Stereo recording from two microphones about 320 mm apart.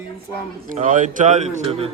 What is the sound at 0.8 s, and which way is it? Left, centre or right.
A man's voice, right.